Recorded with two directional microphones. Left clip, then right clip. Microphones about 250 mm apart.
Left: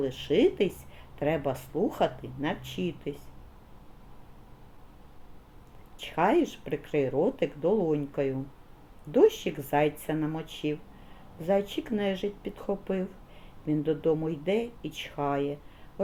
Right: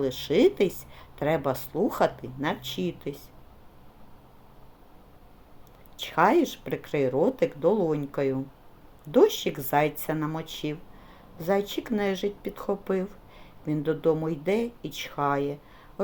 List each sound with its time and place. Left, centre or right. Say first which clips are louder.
0.0 s speech: right 3 dB; centre
6.0 s speech: right 3 dB; centre